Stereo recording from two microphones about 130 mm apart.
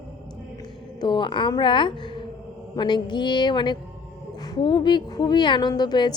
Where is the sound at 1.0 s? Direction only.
35° left (ahead or behind).